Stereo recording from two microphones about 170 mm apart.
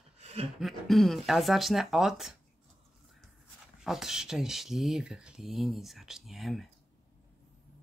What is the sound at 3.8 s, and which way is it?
Speech, centre (ahead or behind).